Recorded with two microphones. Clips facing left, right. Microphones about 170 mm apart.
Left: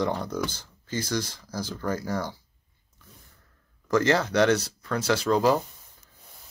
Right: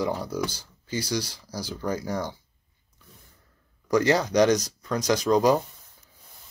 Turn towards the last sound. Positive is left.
turn(degrees=-15)  # may be behind; listen again after turning